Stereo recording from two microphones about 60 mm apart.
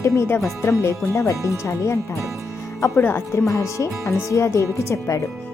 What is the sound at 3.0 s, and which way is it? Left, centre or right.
Speech, left.